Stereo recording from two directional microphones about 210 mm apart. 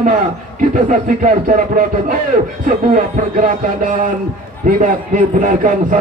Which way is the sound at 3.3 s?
40° right (ahead or behind).